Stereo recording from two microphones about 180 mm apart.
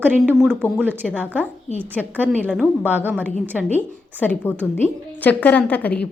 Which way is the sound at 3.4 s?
10° right (ahead or behind).